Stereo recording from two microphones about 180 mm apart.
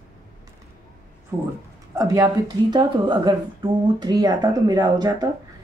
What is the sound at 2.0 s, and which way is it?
A woman's voice, 15° right (ahead or behind).